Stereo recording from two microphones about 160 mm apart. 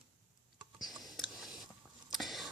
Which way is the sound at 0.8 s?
Centre (ahead or behind).